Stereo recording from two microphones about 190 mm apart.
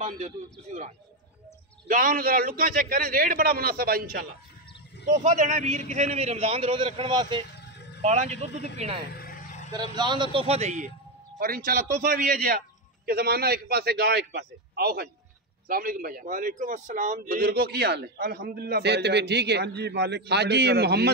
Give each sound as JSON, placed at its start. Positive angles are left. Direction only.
{"t": 1.9, "sound": "a man's voice", "side_deg": -45}
{"t": 5.2, "sound": "a man's voice", "side_deg": -40}
{"t": 8.0, "sound": "a man's voice", "side_deg": -35}
{"t": 9.1, "sound": "a sound", "side_deg": 50}
{"t": 9.7, "sound": "speech", "side_deg": -25}
{"t": 11.3, "sound": "a man's voice", "side_deg": -50}